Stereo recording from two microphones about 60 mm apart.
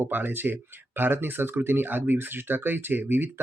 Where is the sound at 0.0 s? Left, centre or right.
Right.